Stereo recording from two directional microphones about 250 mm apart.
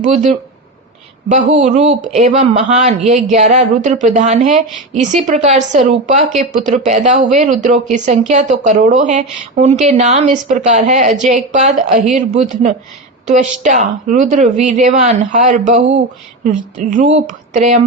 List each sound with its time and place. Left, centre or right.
0.0 s speech: right